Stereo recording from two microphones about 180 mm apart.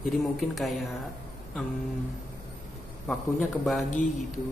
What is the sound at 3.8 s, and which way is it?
Speech, 40° left (ahead or behind).